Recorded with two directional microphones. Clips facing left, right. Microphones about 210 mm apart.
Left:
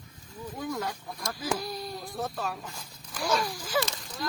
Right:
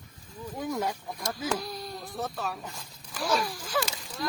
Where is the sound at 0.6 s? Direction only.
20° right (ahead or behind).